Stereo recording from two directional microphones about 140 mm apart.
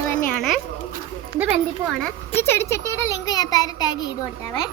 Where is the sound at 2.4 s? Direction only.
15° left (ahead or behind).